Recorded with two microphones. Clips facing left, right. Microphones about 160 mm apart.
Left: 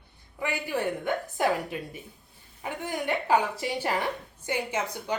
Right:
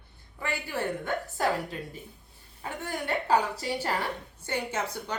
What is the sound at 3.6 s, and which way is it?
Speech, 15° left (ahead or behind).